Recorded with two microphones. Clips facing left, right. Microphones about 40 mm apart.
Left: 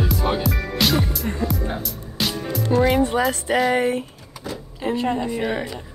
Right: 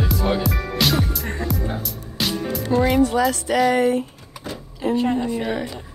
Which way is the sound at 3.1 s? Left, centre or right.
Left.